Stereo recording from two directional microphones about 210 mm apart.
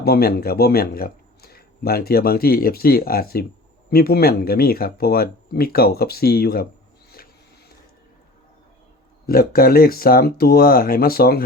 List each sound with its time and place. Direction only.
0.0 s a man's voice: 45° left (ahead or behind)
9.2 s a man's voice: 45° left (ahead or behind)